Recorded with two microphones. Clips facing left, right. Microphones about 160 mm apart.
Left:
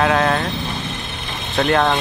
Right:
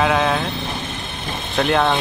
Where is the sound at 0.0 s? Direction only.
Centre (ahead or behind).